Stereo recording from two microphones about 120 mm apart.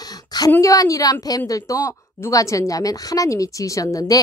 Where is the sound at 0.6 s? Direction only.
30° left (ahead or behind).